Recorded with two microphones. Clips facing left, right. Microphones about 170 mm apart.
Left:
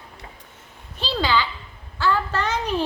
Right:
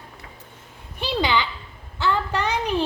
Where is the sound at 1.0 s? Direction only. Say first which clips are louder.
Even; 15° right (ahead or behind).